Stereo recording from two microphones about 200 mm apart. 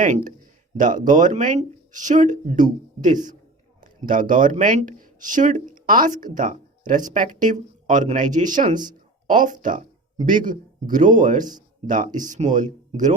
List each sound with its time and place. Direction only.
0.8 s speech: 40° right (ahead or behind)